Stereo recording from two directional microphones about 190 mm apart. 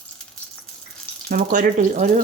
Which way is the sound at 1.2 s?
45° right (ahead or behind).